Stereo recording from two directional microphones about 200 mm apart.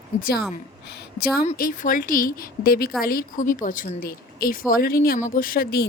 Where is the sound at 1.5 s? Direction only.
40° left (ahead or behind).